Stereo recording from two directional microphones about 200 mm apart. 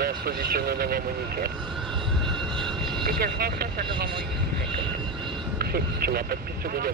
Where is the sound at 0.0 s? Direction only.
50° right (ahead or behind).